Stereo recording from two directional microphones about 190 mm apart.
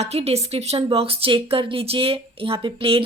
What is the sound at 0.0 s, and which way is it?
Speech, 35° right (ahead or behind).